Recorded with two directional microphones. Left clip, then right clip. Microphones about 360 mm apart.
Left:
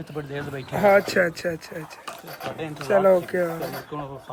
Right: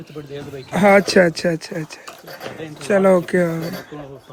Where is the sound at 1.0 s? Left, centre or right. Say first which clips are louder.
Right 7 dB; centre.